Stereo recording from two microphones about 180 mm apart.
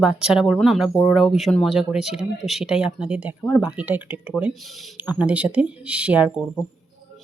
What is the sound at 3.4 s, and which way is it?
Speech, 5° left (ahead or behind).